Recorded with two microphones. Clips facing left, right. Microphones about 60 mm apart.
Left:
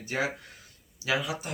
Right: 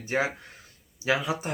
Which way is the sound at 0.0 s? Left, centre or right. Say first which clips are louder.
Right 3 dB; right.